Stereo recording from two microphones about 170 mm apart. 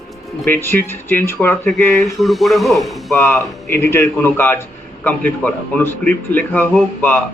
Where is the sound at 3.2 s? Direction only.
15° left (ahead or behind).